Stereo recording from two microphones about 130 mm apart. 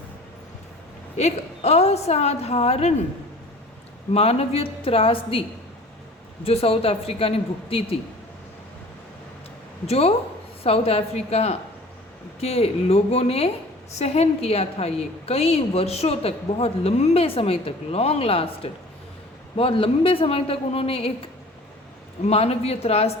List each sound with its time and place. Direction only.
1.1 s a woman's voice: 55° left (ahead or behind)
4.1 s a woman's voice: 50° left (ahead or behind)
9.8 s a woman's voice: 50° left (ahead or behind)